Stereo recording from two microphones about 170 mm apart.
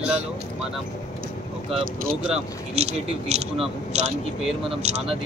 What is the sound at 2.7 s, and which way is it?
Speech, 40° right (ahead or behind).